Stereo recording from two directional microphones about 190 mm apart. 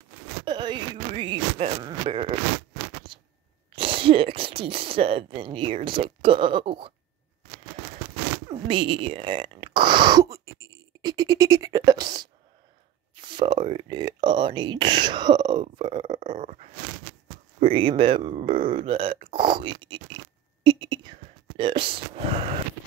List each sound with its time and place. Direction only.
0.5 s speech: 25° right (ahead or behind)
3.1 s a sound: 25° right (ahead or behind)
3.7 s speech: 30° right (ahead or behind)
8.5 s speech: 30° right (ahead or behind)
16.1 s a sound: 40° right (ahead or behind)
17.6 s speech: 30° right (ahead or behind)